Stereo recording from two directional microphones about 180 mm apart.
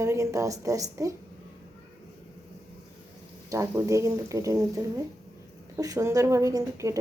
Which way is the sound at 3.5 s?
20° right (ahead or behind).